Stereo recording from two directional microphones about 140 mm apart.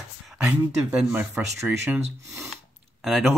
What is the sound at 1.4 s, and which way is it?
Speech, 15° right (ahead or behind).